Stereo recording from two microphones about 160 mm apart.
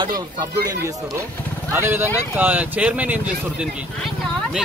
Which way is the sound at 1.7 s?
15° right (ahead or behind).